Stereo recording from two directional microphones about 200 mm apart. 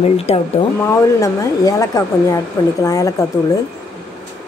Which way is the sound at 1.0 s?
15° left (ahead or behind).